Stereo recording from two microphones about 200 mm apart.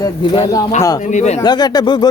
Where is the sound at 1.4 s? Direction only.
20° left (ahead or behind).